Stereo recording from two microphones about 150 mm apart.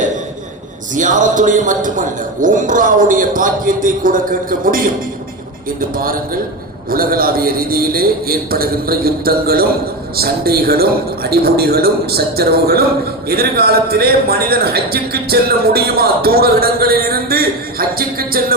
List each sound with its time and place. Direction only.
0.9 s speech: 60° right (ahead or behind)
5.9 s a man's voice: 70° right (ahead or behind)